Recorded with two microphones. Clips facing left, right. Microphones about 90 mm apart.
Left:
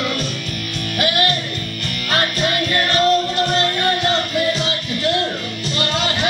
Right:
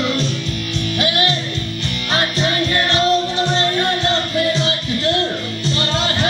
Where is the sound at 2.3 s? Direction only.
25° right (ahead or behind).